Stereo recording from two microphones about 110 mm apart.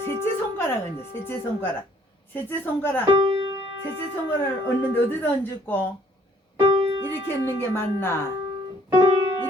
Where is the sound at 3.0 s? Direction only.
60° right (ahead or behind).